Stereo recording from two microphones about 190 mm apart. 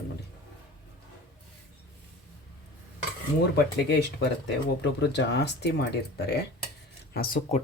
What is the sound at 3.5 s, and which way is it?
Speech, 60° left (ahead or behind).